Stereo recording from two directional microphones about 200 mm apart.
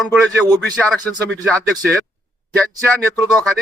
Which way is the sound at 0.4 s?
5° right (ahead or behind).